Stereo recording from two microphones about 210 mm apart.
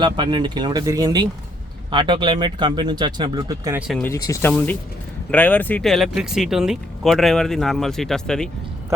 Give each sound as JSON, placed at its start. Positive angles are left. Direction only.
{"t": 0.0, "sound": "speech", "side_deg": -20}
{"t": 3.8, "sound": "speech", "side_deg": 0}
{"t": 4.1, "sound": "speech", "side_deg": 15}